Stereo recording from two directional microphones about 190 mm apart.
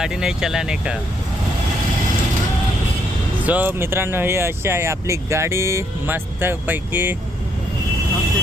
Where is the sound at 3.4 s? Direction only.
10° right (ahead or behind).